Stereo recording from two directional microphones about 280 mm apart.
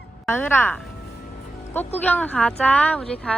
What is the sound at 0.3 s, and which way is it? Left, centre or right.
Speech, centre.